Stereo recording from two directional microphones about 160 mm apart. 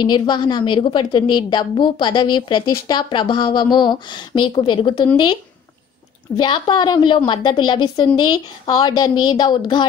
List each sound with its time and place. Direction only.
0.0 s a woman's voice: 25° left (ahead or behind)